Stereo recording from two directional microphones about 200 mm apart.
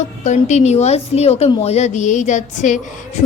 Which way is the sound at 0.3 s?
35° left (ahead or behind).